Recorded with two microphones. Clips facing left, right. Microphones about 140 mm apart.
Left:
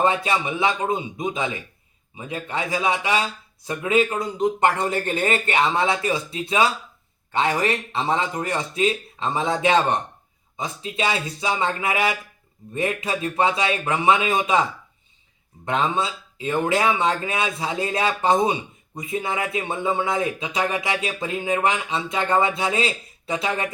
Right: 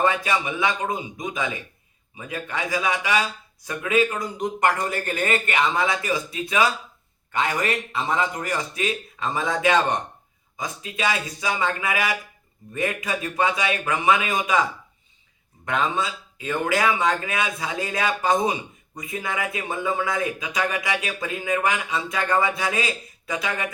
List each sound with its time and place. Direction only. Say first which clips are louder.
0.0 s speech: left 1 dB; 30° left (ahead or behind)
15.6 s speech: left 2 dB; 30° left (ahead or behind)